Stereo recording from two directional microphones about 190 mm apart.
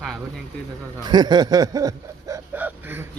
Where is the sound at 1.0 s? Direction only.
20° right (ahead or behind).